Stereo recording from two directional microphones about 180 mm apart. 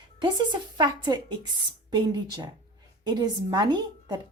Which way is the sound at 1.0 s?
25° right (ahead or behind).